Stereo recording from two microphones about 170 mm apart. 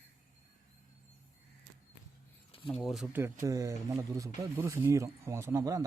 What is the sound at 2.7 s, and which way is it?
Speech, centre (ahead or behind).